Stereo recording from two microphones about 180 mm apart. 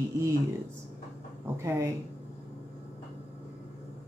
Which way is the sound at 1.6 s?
15° right (ahead or behind).